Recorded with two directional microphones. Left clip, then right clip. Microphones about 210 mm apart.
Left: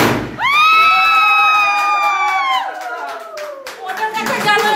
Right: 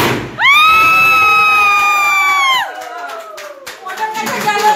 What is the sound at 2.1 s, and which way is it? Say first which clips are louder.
Crowd: right 4 dB; 5° right (ahead or behind).